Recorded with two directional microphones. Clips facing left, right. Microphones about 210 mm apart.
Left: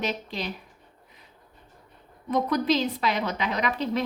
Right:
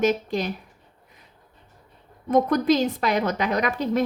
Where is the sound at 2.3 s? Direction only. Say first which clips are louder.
Right 5 dB; 50° right (ahead or behind).